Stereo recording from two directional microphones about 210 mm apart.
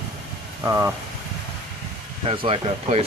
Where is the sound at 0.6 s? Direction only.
15° right (ahead or behind).